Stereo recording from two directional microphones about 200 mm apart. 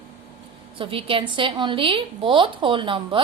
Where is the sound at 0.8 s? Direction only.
25° right (ahead or behind).